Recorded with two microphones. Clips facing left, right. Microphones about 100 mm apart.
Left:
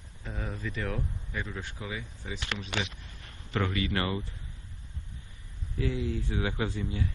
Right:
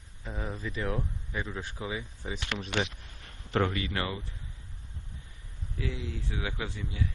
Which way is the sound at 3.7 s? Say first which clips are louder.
Left 2 dB; 25° right (ahead or behind).